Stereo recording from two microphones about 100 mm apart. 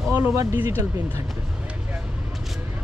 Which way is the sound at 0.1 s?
25° right (ahead or behind).